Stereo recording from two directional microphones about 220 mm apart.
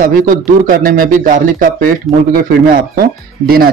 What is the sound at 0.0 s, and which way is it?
A man's voice, 40° right (ahead or behind).